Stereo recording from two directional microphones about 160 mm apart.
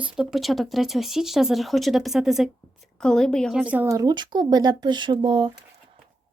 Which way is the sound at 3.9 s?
25° right (ahead or behind).